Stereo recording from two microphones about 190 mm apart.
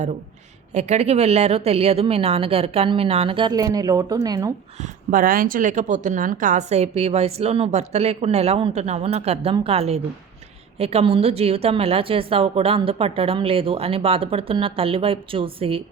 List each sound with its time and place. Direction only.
0.7 s a woman's voice: 35° right (ahead or behind); by 4.5 s 20° right (ahead or behind)
4.8 s a woman's voice: 45° right (ahead or behind); by 15.8 s 30° right (ahead or behind)